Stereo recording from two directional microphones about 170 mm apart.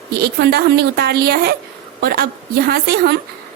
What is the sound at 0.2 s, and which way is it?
A woman's voice, 75° right (ahead or behind).